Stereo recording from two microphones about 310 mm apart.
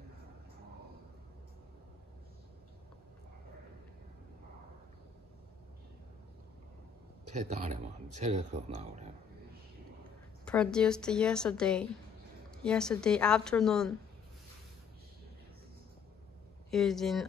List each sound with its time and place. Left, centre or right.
7.4 s speech: right
10.4 s a woman's voice: centre
16.7 s a woman's voice: centre